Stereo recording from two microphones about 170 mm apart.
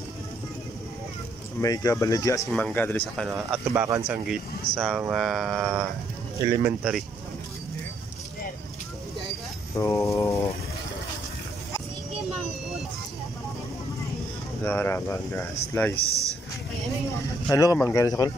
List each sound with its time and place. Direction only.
1.6 s speech: 20° left (ahead or behind)
3.3 s speech: centre (ahead or behind)
3.8 s speech: 15° right (ahead or behind)
4.7 s speech: 5° left (ahead or behind)
6.4 s speech: 20° right (ahead or behind)
6.8 s speech: centre (ahead or behind)
9.8 s speech: 20° left (ahead or behind)
14.6 s speech: 10° left (ahead or behind)
16.1 s a sound: 20° right (ahead or behind)
17.5 s speech: 20° left (ahead or behind)